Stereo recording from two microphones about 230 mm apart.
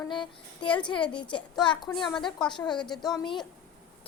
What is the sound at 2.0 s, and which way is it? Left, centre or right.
Speech, centre.